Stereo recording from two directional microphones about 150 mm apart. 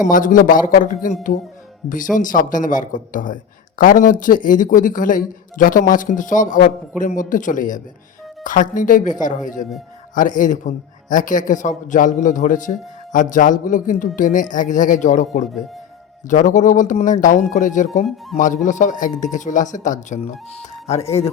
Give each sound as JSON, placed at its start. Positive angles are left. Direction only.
{"t": 0.0, "sound": "a man's voice", "side_deg": 60}